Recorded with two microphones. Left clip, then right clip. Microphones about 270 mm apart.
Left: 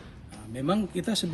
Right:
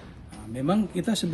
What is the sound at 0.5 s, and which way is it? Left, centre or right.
Speech, centre.